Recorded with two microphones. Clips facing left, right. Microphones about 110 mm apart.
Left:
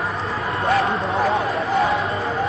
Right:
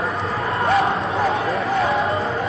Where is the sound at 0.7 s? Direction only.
Centre (ahead or behind).